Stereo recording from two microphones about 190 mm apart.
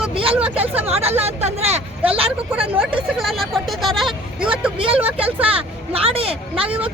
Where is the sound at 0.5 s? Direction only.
30° right (ahead or behind).